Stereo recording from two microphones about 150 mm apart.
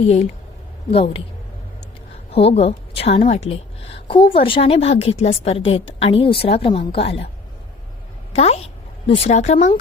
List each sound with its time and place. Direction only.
0.9 s a woman's voice: 40° left (ahead or behind)
2.3 s a woman's voice: 40° left (ahead or behind)
8.3 s a woman's voice: 45° left (ahead or behind)